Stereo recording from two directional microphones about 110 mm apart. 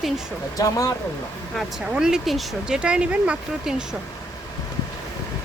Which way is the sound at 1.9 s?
5° right (ahead or behind).